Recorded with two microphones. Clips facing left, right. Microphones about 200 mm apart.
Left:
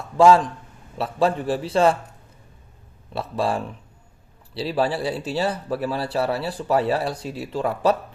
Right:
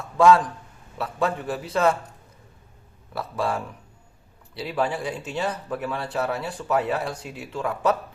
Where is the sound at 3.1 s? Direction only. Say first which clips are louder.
Left 3 dB; 30° left (ahead or behind).